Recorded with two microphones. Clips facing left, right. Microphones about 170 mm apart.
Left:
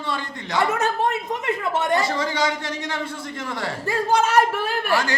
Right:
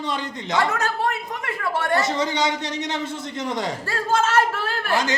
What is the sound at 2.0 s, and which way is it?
A man's voice, 20° right (ahead or behind).